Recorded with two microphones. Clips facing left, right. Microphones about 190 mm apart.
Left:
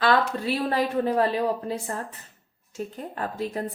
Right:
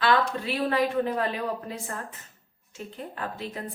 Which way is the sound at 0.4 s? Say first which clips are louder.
Left 1 dB; 40° left (ahead or behind).